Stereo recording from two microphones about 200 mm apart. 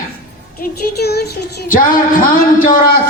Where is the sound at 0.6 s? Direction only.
50° left (ahead or behind).